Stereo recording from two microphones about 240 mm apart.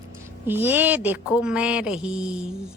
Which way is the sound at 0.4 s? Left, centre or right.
Centre.